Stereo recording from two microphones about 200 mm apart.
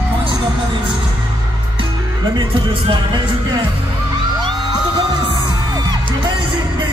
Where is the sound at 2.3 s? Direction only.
25° right (ahead or behind).